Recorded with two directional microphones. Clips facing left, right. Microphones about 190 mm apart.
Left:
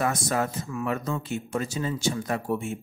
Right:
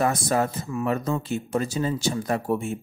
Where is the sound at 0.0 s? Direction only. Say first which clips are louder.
Right 3 dB; 35° right (ahead or behind).